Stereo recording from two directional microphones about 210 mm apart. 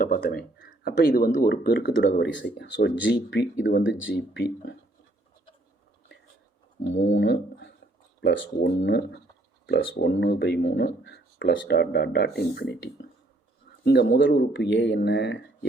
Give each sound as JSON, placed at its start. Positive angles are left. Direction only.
{"t": 0.0, "sound": "a sound", "side_deg": 40}
{"t": 0.9, "sound": "speech", "side_deg": 45}
{"t": 6.9, "sound": "speech", "side_deg": 60}